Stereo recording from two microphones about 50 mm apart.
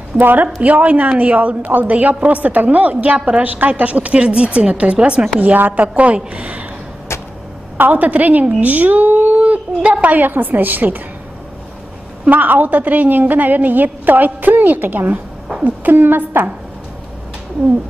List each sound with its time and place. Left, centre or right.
0.2 s a woman's voice: right
0.6 s a woman's voice: right
5.4 s a woman's voice: right
7.7 s a woman's voice: right
12.3 s a woman's voice: right